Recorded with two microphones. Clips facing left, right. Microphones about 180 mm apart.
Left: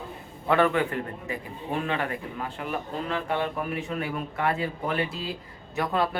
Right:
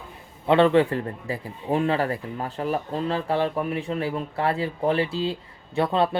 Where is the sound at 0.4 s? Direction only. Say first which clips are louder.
Right 5 dB; 25° right (ahead or behind).